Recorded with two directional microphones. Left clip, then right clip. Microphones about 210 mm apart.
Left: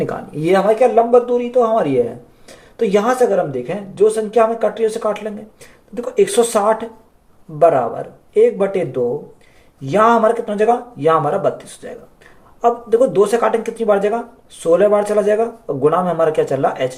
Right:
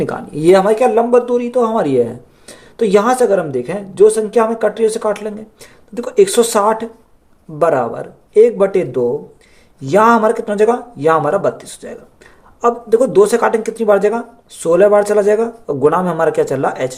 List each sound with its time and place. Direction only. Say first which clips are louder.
0.0 s speech: right 5 dB; 45° right (ahead or behind)